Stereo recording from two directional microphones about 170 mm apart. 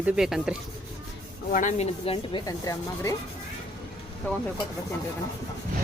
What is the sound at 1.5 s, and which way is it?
Speech, 50° left (ahead or behind).